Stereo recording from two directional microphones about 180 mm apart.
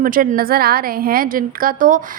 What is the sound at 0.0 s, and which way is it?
A woman's voice, 50° right (ahead or behind).